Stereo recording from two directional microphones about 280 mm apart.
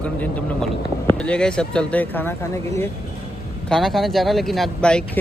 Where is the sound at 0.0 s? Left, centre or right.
Centre.